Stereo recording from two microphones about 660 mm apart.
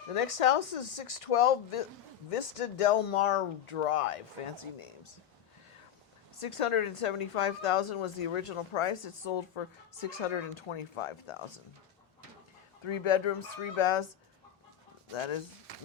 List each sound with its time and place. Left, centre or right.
0.1 s a woman's voice: left
4.5 s a woman's voice: left
6.4 s a woman's voice: left
12.8 s a woman's voice: left
15.1 s a woman's voice: left